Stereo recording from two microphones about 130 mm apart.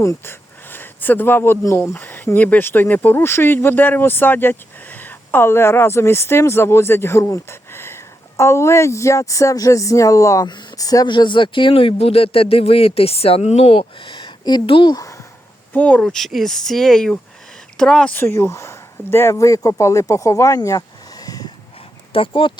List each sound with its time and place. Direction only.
0.0 s speech: 20° left (ahead or behind)
10.5 s speech: 35° left (ahead or behind)
15.7 s speech: 10° left (ahead or behind); by 21.5 s 30° left (ahead or behind)
22.1 s speech: 40° left (ahead or behind)